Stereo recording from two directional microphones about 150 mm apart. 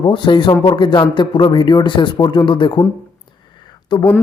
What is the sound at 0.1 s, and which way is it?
Speech, 35° left (ahead or behind).